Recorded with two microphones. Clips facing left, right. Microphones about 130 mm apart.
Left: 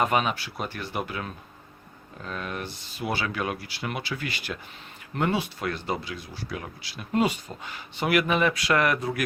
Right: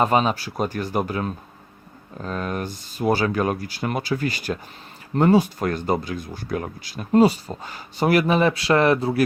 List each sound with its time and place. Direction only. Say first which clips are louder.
0.0 s speech: right 5 dB; 30° right (ahead or behind)